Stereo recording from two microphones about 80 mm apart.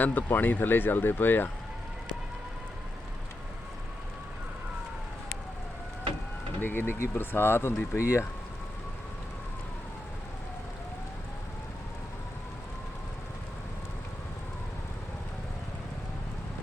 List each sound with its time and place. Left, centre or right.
0.0 s speech: left
6.6 s speech: left